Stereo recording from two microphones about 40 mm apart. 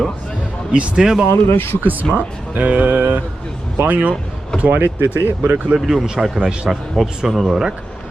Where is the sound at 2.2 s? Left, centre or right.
Right.